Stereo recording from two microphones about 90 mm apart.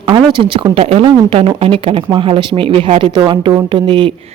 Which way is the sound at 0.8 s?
90° right.